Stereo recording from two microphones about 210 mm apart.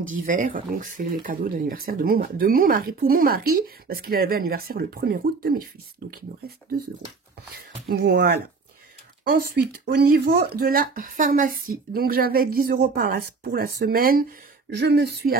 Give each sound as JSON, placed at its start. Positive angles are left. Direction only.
{"t": 0.2, "sound": "speech", "side_deg": -40}
{"t": 7.9, "sound": "speech", "side_deg": -45}